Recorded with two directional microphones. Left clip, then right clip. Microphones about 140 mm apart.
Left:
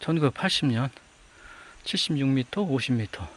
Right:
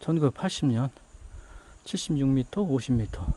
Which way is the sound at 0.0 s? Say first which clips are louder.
Left 2 dB; 15° right (ahead or behind).